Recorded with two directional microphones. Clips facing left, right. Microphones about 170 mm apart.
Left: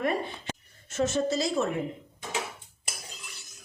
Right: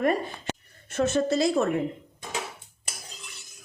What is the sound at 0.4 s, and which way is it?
A woman's voice, 60° right (ahead or behind).